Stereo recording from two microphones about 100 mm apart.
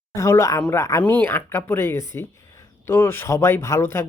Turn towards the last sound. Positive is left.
turn(degrees=25)  # may be behind; listen again after turning